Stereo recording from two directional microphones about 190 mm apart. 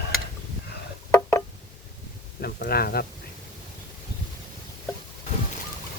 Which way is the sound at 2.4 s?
55° left (ahead or behind).